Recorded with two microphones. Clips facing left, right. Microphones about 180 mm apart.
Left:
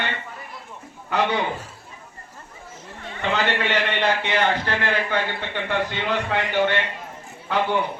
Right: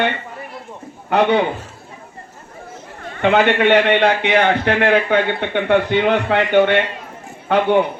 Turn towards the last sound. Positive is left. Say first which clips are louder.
# right 8 dB
turn(degrees=-65)  # may be behind; listen again after turning